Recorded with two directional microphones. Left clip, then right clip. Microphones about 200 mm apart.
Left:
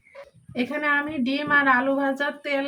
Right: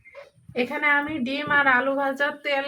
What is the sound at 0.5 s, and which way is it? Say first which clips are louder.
A woman's voice: right 2 dB; 20° right (ahead or behind).